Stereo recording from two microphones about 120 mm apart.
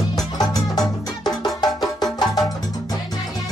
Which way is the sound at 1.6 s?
35° left (ahead or behind).